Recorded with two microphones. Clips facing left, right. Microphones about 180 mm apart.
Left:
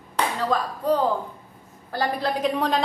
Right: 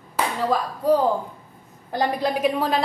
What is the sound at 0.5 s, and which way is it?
A woman's voice, 10° right (ahead or behind).